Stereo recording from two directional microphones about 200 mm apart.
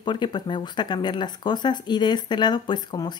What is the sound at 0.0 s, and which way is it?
Speech, 20° left (ahead or behind).